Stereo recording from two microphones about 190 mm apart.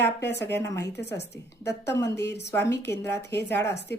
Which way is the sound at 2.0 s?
15° left (ahead or behind).